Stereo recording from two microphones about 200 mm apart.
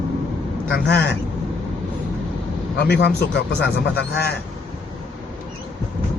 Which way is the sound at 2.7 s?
55° left (ahead or behind).